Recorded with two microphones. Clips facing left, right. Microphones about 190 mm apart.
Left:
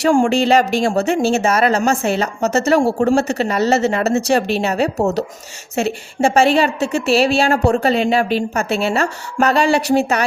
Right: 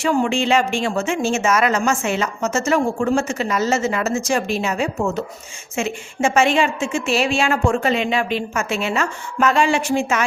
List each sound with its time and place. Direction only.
0.0 s a woman's voice: 45° left (ahead or behind)